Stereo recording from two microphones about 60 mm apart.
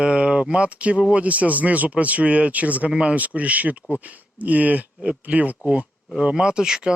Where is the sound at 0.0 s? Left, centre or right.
Centre.